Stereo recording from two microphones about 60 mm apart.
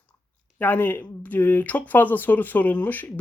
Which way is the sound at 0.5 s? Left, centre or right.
Left.